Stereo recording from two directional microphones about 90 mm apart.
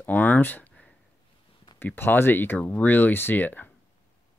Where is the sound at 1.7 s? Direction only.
25° left (ahead or behind).